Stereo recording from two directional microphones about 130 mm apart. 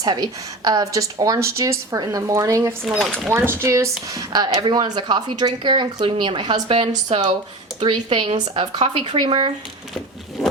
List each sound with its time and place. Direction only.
0.0 s speech: 30° right (ahead or behind)
2.8 s speech: centre (ahead or behind)
3.2 s speech: 15° right (ahead or behind); by 9.5 s 40° right (ahead or behind)
9.9 s a sound: centre (ahead or behind)